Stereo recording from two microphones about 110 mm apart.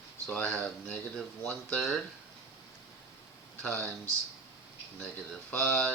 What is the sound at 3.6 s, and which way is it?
Speech, 5° left (ahead or behind).